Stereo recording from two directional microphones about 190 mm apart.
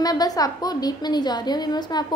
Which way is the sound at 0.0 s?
20° left (ahead or behind).